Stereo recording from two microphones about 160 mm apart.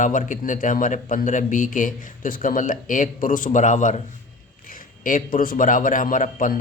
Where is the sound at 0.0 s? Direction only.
55° left (ahead or behind).